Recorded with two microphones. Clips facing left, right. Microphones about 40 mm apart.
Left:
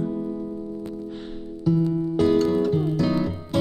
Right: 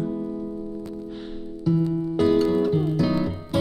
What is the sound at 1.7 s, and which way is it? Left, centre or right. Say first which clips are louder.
Music: left 1 dB; centre.